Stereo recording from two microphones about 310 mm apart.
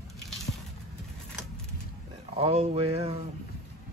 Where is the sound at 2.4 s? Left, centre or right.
Centre.